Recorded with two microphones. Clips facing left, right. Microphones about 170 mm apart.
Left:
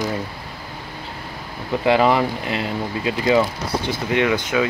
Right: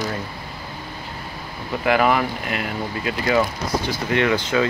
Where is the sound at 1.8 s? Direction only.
25° left (ahead or behind).